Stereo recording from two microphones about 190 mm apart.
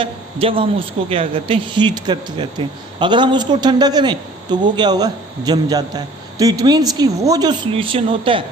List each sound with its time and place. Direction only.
0.0 s a man's voice: 30° right (ahead or behind)